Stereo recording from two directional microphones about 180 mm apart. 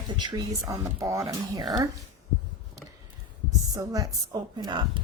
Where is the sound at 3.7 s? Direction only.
20° right (ahead or behind).